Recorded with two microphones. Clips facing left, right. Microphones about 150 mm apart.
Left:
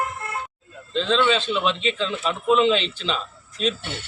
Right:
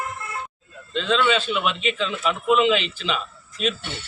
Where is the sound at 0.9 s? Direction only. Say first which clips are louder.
Left 1 dB; 35° left (ahead or behind).